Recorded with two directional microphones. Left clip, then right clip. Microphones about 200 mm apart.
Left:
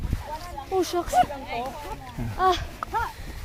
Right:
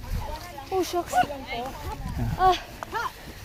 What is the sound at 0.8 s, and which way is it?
Speech, 45° left (ahead or behind).